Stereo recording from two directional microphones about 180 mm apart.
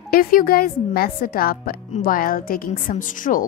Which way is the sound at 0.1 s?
55° left (ahead or behind).